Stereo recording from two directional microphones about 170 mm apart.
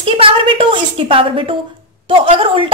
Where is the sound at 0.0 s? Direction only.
30° right (ahead or behind).